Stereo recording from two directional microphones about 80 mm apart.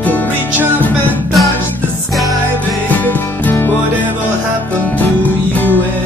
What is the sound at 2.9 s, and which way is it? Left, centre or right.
Music, left.